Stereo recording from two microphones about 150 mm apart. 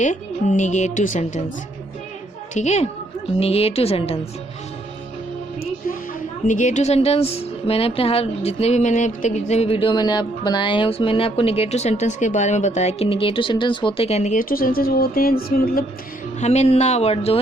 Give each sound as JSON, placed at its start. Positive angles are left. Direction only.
{"t": 0.0, "sound": "a woman's voice", "side_deg": 55}
{"t": 2.6, "sound": "a woman's voice", "side_deg": 50}
{"t": 6.5, "sound": "a woman's voice", "side_deg": 55}
{"t": 14.3, "sound": "speech", "side_deg": 75}
{"t": 16.4, "sound": "speech", "side_deg": 45}